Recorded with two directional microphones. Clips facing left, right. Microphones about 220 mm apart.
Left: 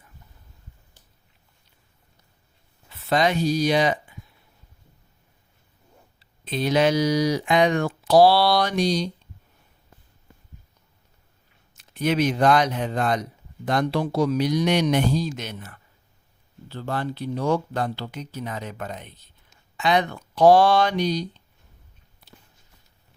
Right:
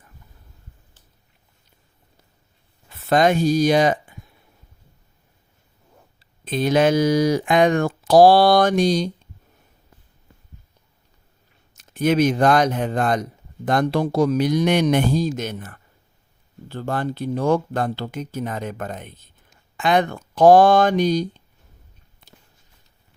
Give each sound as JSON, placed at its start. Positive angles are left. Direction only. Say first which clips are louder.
{"t": 2.9, "sound": "speech", "louder": "right 5 dB", "side_deg": -50}
{"t": 6.1, "sound": "speech", "louder": "right 4 dB", "side_deg": -50}
{"t": 11.7, "sound": "speech", "louder": "right 4 dB", "side_deg": -45}